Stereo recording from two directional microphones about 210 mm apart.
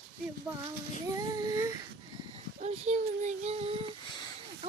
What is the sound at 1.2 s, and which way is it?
Child singing, 20° right (ahead or behind).